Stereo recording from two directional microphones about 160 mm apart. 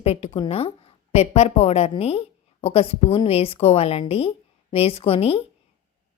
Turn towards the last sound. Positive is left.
turn(degrees=40)  # may be behind; listen again after turning